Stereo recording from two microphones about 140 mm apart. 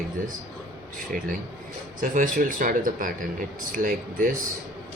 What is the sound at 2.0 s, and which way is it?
Speech, 85° right.